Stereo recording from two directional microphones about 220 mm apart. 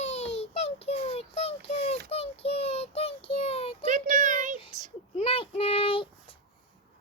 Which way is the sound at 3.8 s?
35° right (ahead or behind).